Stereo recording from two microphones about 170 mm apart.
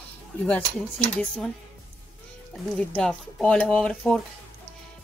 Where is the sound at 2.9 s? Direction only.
5° left (ahead or behind).